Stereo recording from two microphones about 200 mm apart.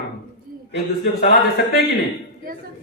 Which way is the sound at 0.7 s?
55° left (ahead or behind).